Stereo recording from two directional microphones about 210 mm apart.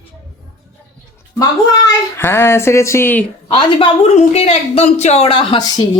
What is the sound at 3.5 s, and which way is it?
Speech, 30° left (ahead or behind).